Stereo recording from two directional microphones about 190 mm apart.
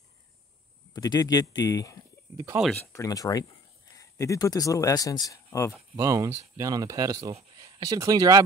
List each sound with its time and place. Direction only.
0.9 s speech: 20° left (ahead or behind)
2.3 s speech: 15° right (ahead or behind)
2.9 s speech: 15° left (ahead or behind)
5.9 s speech: 15° right (ahead or behind)